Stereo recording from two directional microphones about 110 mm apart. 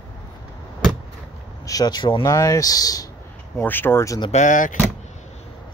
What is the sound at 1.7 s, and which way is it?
Speech, 35° left (ahead or behind).